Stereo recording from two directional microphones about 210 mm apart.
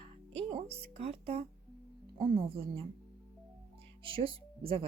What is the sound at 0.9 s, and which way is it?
Speech, 30° right (ahead or behind).